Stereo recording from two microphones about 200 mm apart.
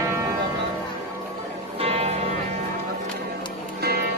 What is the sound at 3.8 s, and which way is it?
Music, 50° right (ahead or behind).